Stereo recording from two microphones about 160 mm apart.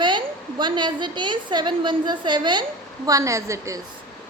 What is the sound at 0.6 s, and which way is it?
A woman's voice, 30° right (ahead or behind).